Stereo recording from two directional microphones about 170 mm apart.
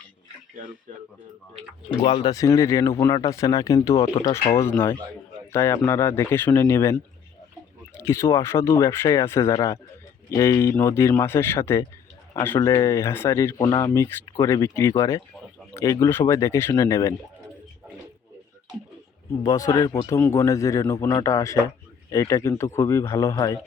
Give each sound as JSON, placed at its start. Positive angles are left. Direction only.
{"t": 2.0, "sound": "a man's voice", "side_deg": 25}
{"t": 4.0, "sound": "speech", "side_deg": 30}
{"t": 4.3, "sound": "speech", "side_deg": 15}
{"t": 19.4, "sound": "a man's voice", "side_deg": 20}